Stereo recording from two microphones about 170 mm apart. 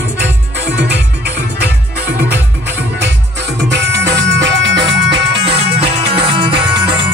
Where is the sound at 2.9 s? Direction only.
90° right.